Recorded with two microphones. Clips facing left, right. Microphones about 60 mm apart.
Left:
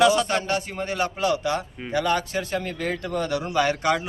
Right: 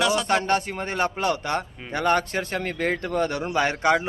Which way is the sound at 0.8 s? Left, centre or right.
Right.